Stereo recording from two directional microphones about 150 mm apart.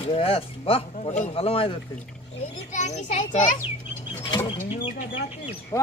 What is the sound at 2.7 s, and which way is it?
Speech, 50° left (ahead or behind).